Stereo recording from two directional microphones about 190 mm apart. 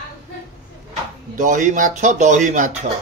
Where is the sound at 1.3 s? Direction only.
40° right (ahead or behind).